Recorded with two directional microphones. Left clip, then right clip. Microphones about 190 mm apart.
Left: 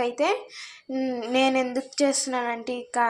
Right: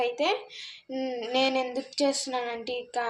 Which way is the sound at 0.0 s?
15° left (ahead or behind).